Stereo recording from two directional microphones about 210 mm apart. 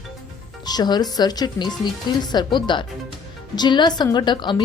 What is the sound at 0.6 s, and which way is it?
Speech, 20° left (ahead or behind).